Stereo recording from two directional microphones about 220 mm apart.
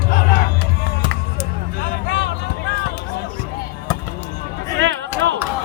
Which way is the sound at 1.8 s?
45° left (ahead or behind).